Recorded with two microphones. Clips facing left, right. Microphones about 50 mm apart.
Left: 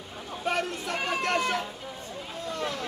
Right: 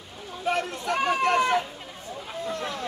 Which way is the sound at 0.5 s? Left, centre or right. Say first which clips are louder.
Right 3 dB; centre.